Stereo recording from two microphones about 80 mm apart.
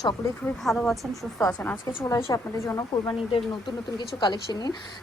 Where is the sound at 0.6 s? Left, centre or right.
Centre.